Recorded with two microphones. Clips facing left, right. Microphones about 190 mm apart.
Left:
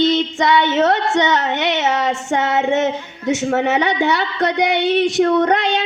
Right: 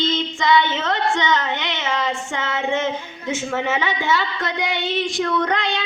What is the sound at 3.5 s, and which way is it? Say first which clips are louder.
Speech: left 6 dB; 70° left (ahead or behind).